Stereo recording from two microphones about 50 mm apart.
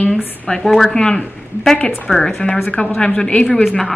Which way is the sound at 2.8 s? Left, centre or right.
Left.